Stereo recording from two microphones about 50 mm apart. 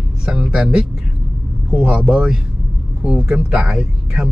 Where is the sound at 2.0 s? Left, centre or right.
Centre.